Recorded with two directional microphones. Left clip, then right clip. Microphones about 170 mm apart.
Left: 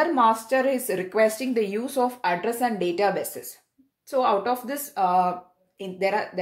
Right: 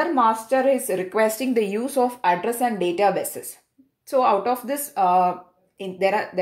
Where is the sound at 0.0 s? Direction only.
5° left (ahead or behind).